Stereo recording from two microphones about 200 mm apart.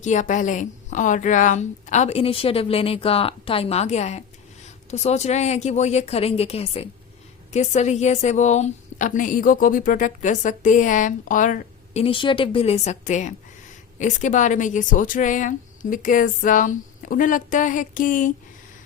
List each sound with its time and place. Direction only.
0.0 s a woman's voice: 40° left (ahead or behind)